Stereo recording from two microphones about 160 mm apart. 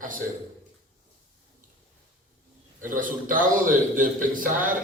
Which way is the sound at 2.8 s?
55° right (ahead or behind).